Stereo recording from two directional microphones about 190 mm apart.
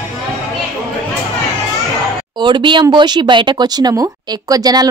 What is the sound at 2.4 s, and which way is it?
Speech, 25° right (ahead or behind).